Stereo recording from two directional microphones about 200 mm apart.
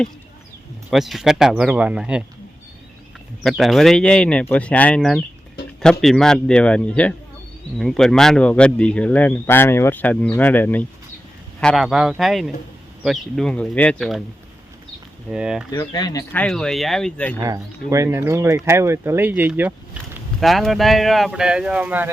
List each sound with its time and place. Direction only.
0.9 s speech: centre (ahead or behind)
3.4 s speech: centre (ahead or behind)
15.3 s speech: 5° right (ahead or behind)
15.7 s speech: 20° left (ahead or behind)
16.3 s speech: 5° left (ahead or behind)
17.4 s speech: 15° right (ahead or behind)